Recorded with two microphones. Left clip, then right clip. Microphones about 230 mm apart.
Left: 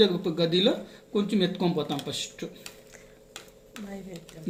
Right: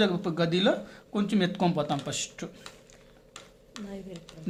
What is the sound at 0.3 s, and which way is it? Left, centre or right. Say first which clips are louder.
Speech: left 2 dB; right.